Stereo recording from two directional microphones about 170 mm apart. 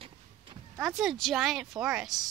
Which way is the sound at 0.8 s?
Centre (ahead or behind).